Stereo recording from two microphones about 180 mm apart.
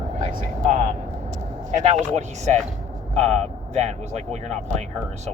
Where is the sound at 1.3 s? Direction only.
40° right (ahead or behind).